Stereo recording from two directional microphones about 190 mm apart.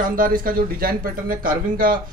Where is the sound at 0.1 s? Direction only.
50° right (ahead or behind).